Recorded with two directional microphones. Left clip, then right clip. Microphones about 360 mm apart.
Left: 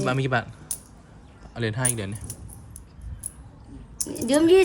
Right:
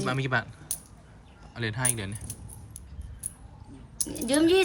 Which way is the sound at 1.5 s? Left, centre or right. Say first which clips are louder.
Left 3 dB; centre.